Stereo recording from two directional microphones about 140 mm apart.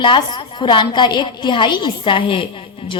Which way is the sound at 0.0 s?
35° left (ahead or behind).